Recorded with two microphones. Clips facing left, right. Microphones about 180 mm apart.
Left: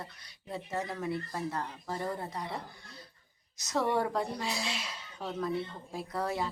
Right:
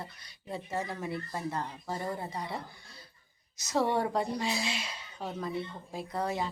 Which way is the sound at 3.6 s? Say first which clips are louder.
Right 1 dB; centre (ahead or behind).